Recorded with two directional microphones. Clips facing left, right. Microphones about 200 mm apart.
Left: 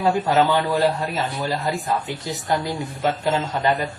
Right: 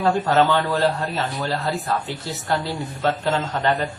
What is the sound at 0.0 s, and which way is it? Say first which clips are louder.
Speech: even; 10° left (ahead or behind).